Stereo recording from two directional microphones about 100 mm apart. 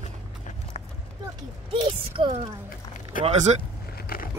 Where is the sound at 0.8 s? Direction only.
90° left.